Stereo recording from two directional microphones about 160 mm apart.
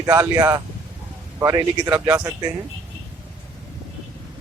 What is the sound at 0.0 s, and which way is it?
Speech, 20° right (ahead or behind).